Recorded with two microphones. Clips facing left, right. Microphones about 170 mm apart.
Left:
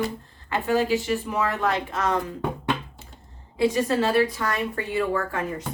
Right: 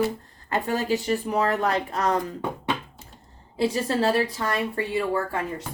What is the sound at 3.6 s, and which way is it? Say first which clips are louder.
A woman's voice: left 2 dB; 35° right (ahead or behind).